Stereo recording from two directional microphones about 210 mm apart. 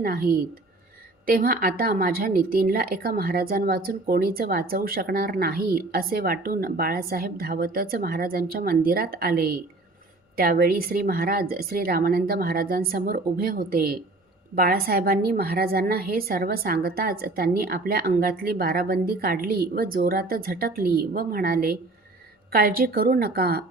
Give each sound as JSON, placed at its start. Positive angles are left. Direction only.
{"t": 0.0, "sound": "a woman's voice", "side_deg": -45}